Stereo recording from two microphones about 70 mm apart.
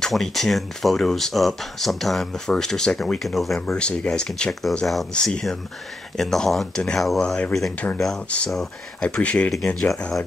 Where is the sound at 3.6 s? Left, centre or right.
Centre.